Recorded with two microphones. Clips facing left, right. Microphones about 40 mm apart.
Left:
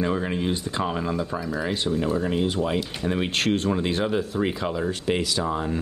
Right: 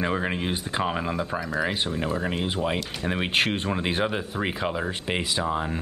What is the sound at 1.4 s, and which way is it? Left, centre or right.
Speech, centre.